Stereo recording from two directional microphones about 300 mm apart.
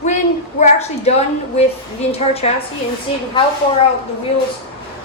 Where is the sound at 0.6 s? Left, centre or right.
Left.